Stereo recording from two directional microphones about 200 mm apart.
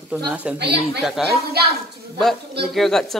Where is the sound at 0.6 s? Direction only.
55° right (ahead or behind).